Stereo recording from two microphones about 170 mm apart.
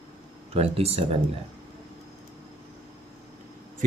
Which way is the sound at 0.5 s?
35° right (ahead or behind).